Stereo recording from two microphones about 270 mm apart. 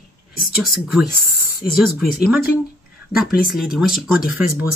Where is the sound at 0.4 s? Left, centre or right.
Centre.